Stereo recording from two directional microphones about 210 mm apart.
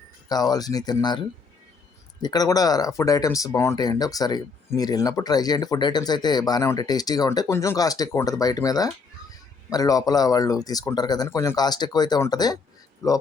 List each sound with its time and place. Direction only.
0.3 s speech: 20° left (ahead or behind)
2.2 s speech: 20° left (ahead or behind)